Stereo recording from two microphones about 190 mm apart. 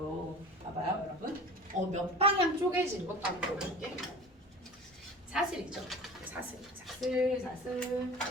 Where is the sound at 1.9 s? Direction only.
30° right (ahead or behind).